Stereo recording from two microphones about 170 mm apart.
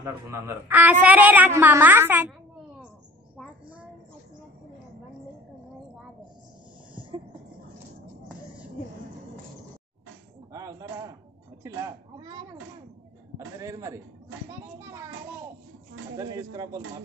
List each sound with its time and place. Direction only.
0.0 s a woman's voice: 15° right (ahead or behind)
10.5 s a sound: 20° right (ahead or behind)
11.6 s speech: 20° right (ahead or behind)
13.6 s a woman's voice: 20° right (ahead or behind)
16.2 s speech: 20° right (ahead or behind)